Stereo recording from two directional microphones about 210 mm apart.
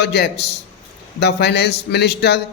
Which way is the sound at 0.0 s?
50° left (ahead or behind).